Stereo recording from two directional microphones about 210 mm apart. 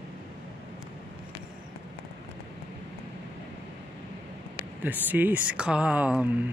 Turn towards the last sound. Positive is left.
turn(degrees=-5)  # may be behind; listen again after turning